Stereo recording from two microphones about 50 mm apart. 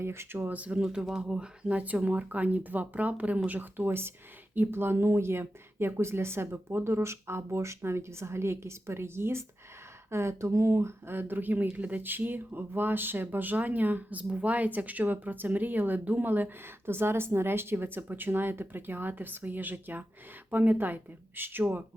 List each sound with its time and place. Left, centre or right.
0.0 s speech: right
0.5 s speech: right
0.8 s speech: centre; by 21.8 s right